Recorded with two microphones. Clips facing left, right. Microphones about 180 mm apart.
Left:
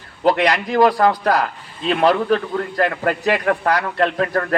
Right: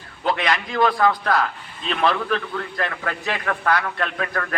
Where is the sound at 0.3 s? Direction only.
40° left (ahead or behind).